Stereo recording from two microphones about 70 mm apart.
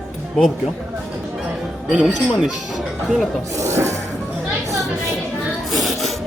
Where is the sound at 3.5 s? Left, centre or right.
Right.